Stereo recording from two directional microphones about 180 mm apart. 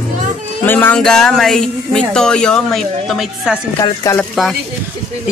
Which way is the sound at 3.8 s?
15° left (ahead or behind).